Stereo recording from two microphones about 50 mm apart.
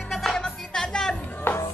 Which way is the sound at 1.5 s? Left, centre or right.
Left.